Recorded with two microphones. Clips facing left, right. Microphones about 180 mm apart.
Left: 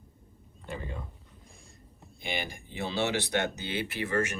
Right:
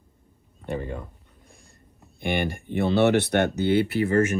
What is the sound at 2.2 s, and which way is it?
Speech, 60° right (ahead or behind).